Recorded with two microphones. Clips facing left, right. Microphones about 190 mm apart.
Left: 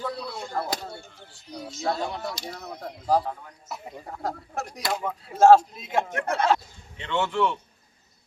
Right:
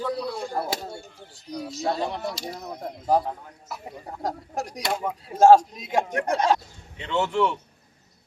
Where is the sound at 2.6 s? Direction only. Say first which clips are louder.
Right 1 dB; 15° right (ahead or behind).